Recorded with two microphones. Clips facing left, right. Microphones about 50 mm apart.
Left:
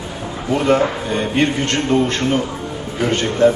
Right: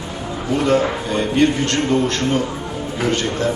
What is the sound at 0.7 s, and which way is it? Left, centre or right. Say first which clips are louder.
A man's voice: left 2 dB; centre.